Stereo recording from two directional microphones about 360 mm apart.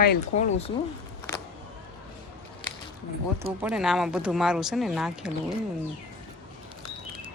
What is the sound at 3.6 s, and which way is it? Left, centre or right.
A woman's voice, centre.